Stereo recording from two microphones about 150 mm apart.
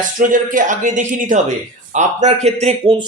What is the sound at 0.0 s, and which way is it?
Speech, 60° right (ahead or behind).